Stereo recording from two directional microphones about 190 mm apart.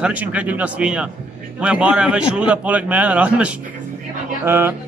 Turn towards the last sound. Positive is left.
turn(degrees=-10)  # may be behind; listen again after turning